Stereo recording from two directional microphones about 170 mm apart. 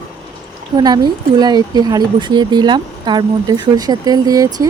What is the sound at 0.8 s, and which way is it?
Speech, 25° right (ahead or behind).